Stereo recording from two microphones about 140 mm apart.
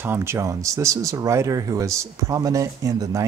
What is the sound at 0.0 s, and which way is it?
Speech, 15° right (ahead or behind).